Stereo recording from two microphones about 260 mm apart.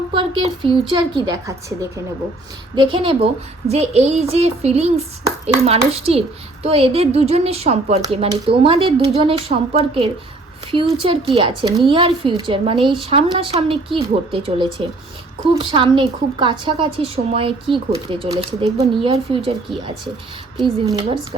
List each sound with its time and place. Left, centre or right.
0.1 s a woman's voice: centre
20.6 s a woman's voice: centre